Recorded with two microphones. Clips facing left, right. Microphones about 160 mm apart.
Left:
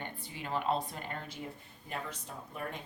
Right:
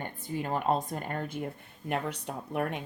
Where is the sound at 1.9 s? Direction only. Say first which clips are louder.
Right 8 dB; 70° right (ahead or behind).